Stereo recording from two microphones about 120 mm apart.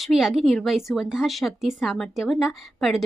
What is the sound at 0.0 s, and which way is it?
A woman's voice, 5° right (ahead or behind).